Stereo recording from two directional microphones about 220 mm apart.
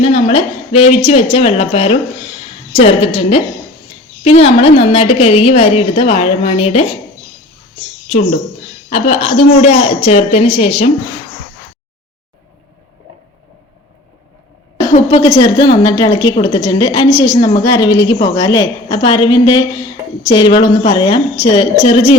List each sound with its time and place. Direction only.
0.0 s a woman's voice: 25° left (ahead or behind)
8.9 s a woman's voice: 30° left (ahead or behind)
14.9 s a woman's voice: 30° left (ahead or behind)